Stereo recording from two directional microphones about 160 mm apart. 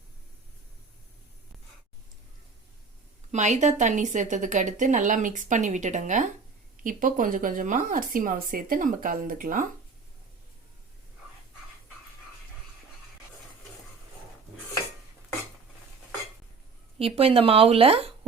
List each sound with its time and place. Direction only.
3.3 s a woman's voice: 50° right (ahead or behind)
17.0 s speech: 35° right (ahead or behind)